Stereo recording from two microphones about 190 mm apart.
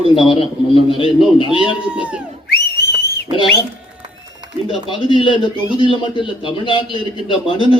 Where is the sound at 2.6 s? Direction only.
60° left (ahead or behind).